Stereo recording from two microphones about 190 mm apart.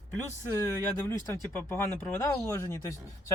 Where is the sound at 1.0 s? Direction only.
15° left (ahead or behind).